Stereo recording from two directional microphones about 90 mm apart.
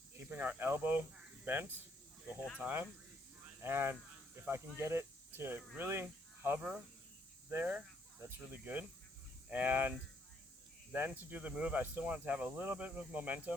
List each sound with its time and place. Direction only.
0.2 s speech: 20° right (ahead or behind)
10.9 s speech: 20° right (ahead or behind)